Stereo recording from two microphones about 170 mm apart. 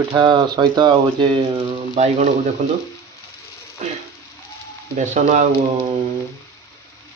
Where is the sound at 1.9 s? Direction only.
45° right (ahead or behind).